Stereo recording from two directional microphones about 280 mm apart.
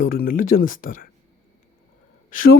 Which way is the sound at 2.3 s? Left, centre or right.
Left.